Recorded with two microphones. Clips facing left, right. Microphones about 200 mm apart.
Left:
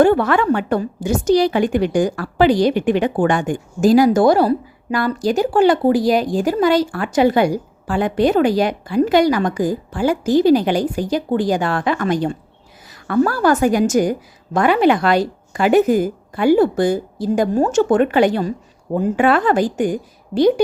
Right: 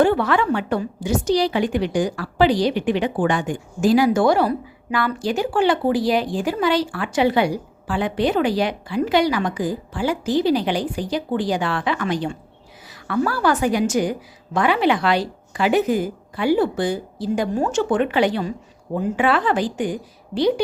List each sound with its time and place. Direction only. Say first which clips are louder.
0.0 s a woman's voice: left 4 dB; 50° left (ahead or behind)